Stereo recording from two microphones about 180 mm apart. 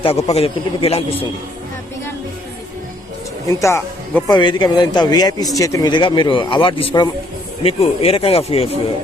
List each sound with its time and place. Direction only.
0.0 s speech: 35° left (ahead or behind)
3.4 s speech: 15° left (ahead or behind)
4.3 s speech: 25° left (ahead or behind)